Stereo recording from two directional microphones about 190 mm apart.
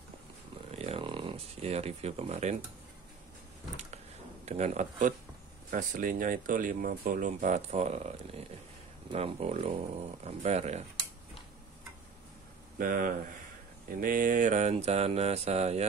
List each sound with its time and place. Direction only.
0.7 s a sound: 35° right (ahead or behind)
4.5 s mantra: 35° right (ahead or behind)
5.7 s speech: 45° right (ahead or behind)
9.1 s mantra: 30° right (ahead or behind)
12.7 s speech: 45° right (ahead or behind)
13.8 s mantra: 45° right (ahead or behind)